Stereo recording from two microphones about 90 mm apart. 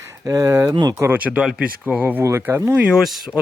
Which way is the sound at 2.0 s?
20° right (ahead or behind).